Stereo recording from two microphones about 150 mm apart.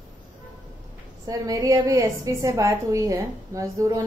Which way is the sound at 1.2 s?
25° right (ahead or behind).